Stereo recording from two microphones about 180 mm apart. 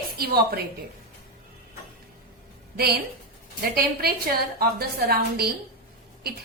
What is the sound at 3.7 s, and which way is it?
Speech, 55° right (ahead or behind).